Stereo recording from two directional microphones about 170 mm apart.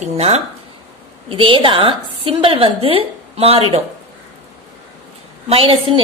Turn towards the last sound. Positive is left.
turn(degrees=-35)  # may be behind; listen again after turning